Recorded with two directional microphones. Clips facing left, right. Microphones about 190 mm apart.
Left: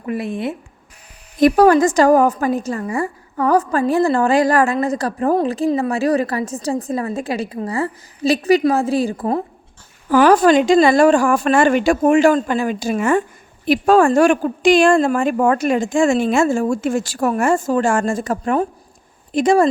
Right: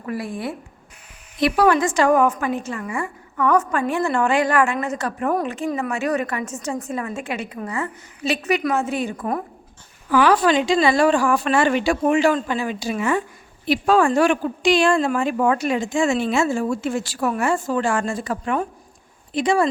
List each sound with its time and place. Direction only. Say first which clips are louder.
0.0 s speech: left 4 dB; 20° left (ahead or behind)
1.4 s a woman's voice: left 6 dB; 45° left (ahead or behind)
10.1 s speech: left 5 dB; 45° left (ahead or behind)